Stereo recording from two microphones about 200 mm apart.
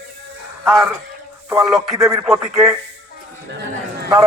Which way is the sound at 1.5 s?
15° right (ahead or behind).